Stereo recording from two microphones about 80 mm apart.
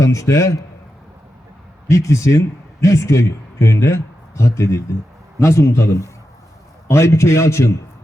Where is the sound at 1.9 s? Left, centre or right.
Left.